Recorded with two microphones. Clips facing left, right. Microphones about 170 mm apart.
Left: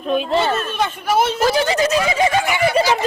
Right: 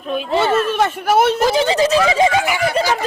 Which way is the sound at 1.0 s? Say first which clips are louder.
Right 3 dB; 60° right (ahead or behind).